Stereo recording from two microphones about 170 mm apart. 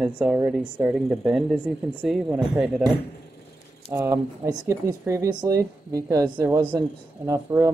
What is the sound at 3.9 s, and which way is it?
Speech, 15° right (ahead or behind).